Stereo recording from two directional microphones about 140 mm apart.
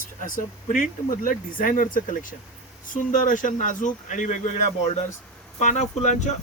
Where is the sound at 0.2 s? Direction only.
75° left (ahead or behind).